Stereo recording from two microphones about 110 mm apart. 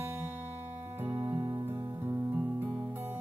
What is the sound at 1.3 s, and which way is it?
Music, 35° right (ahead or behind).